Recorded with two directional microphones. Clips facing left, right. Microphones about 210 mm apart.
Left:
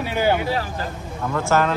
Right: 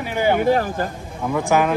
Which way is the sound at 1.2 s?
15° right (ahead or behind).